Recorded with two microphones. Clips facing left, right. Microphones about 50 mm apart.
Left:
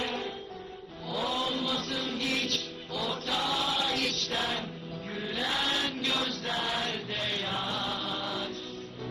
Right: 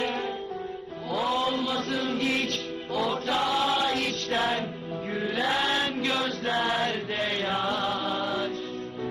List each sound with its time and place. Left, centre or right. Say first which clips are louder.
1.2 s mantra: right 5 dB; right
3.2 s choir: right 3 dB; right
3.7 s music: right 4 dB; right
5.1 s music: right 5 dB; right
5.7 s chant: right 4 dB; right
7.9 s music: right 6 dB; right